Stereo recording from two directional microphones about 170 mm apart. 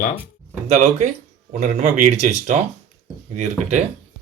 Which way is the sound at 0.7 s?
40° right (ahead or behind).